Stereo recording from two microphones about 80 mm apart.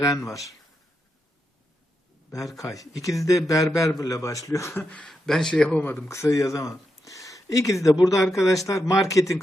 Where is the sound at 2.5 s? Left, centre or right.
Left.